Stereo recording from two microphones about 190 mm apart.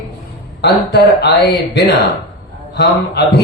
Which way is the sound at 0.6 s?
60° left (ahead or behind).